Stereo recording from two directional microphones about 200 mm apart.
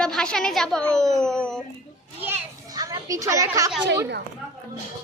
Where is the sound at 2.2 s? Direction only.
15° right (ahead or behind).